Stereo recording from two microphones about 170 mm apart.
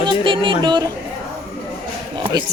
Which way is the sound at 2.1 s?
25° right (ahead or behind).